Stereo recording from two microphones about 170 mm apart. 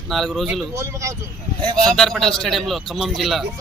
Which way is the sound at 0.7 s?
15° right (ahead or behind).